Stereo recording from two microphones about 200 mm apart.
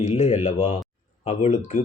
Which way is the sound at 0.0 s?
30° left (ahead or behind).